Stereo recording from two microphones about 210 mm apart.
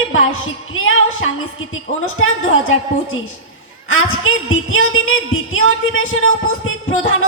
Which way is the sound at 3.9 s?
75° left (ahead or behind).